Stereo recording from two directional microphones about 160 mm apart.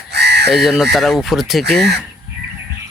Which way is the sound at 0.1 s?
90° right.